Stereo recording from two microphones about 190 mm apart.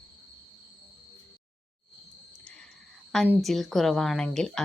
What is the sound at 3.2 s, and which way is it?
A woman's voice, 5° right (ahead or behind).